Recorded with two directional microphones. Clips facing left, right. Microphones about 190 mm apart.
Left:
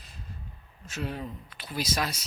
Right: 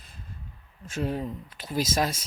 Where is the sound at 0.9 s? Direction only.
40° right (ahead or behind).